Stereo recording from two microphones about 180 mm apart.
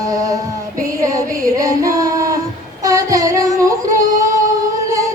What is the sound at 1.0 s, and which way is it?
Music, 20° right (ahead or behind).